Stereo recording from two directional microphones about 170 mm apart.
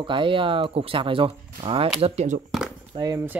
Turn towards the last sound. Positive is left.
turn(degrees=-30)  # may be behind; listen again after turning